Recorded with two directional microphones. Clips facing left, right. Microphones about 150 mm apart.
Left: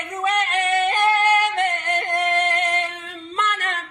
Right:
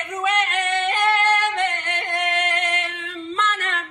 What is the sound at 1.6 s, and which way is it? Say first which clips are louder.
Singing: left 2 dB; 40° left (ahead or behind).